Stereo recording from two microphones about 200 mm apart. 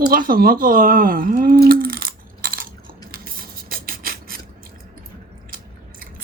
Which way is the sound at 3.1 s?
45° right (ahead or behind).